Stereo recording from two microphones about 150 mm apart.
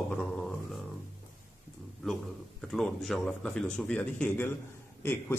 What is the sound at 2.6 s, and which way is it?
Speech, centre (ahead or behind).